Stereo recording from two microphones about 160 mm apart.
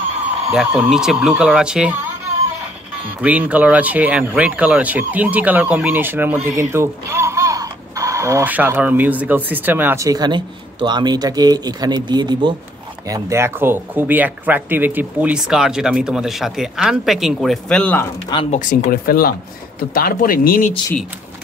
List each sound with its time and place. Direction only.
0.7 s speech: 5° right (ahead or behind)
3.2 s speech: 10° right (ahead or behind); by 12.5 s 30° right (ahead or behind)
13.1 s speech: 15° right (ahead or behind); by 18.0 s 5° left (ahead or behind)
18.5 s speech: 55° left (ahead or behind)